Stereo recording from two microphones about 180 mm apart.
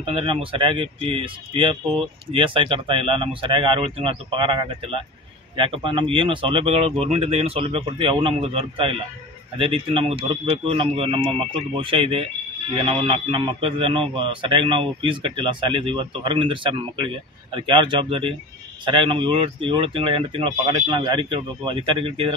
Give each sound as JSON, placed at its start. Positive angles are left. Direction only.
{"t": 0.0, "sound": "speech", "side_deg": -30}